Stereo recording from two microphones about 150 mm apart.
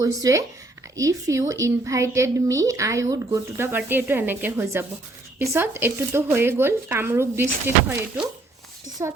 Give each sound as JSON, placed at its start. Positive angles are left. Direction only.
{"t": 0.0, "sound": "a woman's voice", "side_deg": -20}
{"t": 9.0, "sound": "speech", "side_deg": -15}